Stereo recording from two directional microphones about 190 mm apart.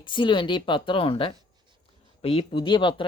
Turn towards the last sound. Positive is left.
turn(degrees=25)  # may be behind; listen again after turning